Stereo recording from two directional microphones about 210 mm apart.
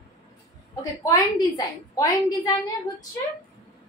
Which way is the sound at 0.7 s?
15° left (ahead or behind).